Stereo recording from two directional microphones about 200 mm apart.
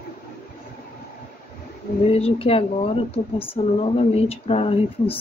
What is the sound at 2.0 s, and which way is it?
Speech, 30° left (ahead or behind).